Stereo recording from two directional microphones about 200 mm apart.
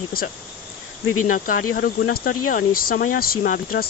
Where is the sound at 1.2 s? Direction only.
40° left (ahead or behind).